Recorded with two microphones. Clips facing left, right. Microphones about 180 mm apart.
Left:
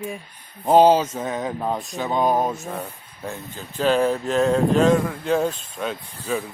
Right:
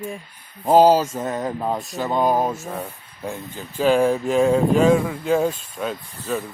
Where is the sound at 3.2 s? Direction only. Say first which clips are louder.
Right 2 dB; 10° right (ahead or behind).